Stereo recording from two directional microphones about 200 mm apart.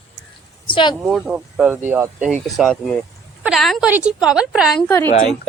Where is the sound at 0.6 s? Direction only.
25° left (ahead or behind).